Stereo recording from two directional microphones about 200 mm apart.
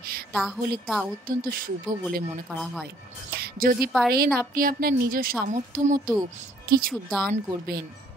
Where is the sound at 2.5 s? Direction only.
Centre (ahead or behind).